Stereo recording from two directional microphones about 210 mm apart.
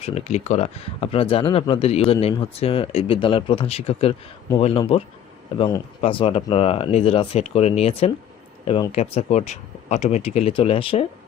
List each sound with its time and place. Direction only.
0.0 s speech: 30° left (ahead or behind)